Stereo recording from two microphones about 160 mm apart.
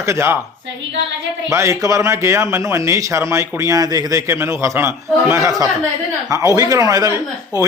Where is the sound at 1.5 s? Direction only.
15° right (ahead or behind).